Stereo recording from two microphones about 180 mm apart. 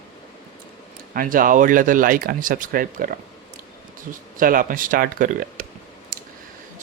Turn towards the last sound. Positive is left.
turn(degrees=-50)  # may be behind; listen again after turning